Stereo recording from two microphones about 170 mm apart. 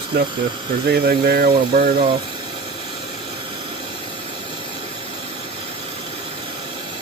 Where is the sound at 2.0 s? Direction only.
30° right (ahead or behind).